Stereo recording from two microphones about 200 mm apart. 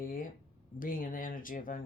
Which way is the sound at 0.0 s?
45° left (ahead or behind).